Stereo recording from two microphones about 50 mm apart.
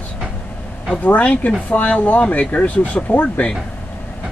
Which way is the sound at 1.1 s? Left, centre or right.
Left.